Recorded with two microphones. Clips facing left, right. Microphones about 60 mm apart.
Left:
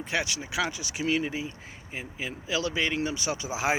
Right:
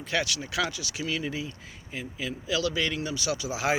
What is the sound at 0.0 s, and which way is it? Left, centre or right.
Speech, centre.